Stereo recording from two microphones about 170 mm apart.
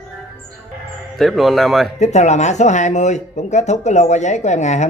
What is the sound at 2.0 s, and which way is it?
Speech, 40° left (ahead or behind).